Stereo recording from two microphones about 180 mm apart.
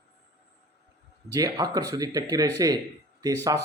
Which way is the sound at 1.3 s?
20° right (ahead or behind).